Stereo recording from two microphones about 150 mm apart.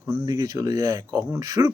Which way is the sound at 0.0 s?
20° right (ahead or behind).